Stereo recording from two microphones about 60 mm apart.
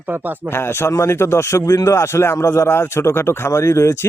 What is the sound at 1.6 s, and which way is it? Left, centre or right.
A man's voice, left.